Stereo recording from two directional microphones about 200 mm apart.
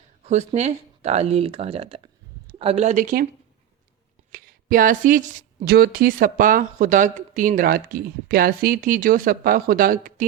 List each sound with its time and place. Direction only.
0.3 s speech: 35° right (ahead or behind)
4.3 s speech: 45° right (ahead or behind)